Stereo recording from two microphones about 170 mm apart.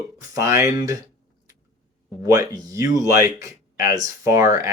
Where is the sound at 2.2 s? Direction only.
20° right (ahead or behind).